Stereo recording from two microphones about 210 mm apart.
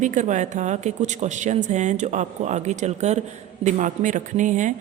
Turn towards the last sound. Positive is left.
turn(degrees=-35)  # may be behind; listen again after turning